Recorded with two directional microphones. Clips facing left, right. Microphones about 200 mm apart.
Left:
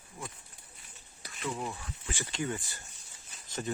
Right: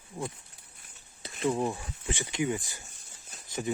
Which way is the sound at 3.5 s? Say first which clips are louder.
Right 4 dB; 10° right (ahead or behind).